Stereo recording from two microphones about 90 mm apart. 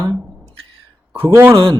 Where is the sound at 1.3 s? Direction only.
30° right (ahead or behind).